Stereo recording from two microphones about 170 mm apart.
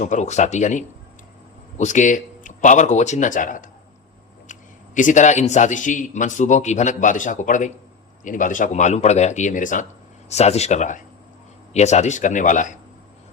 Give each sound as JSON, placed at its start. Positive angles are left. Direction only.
{"t": 0.0, "sound": "a man's voice", "side_deg": 45}
{"t": 4.9, "sound": "a man's voice", "side_deg": 45}